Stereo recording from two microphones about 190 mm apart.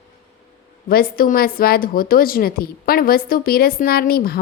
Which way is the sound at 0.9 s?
50° left (ahead or behind).